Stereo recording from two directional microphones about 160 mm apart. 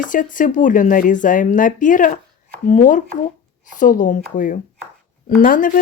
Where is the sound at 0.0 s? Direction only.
55° left (ahead or behind).